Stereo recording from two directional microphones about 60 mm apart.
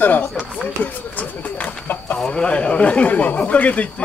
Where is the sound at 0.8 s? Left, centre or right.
Left.